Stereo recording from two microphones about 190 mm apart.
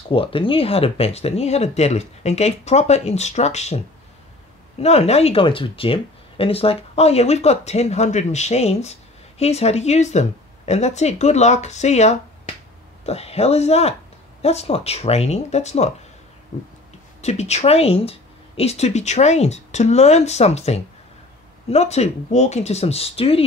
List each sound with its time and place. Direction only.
0.1 s speech: 30° left (ahead or behind)